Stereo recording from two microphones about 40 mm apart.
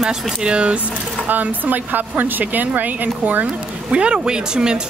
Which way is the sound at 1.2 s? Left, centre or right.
Right.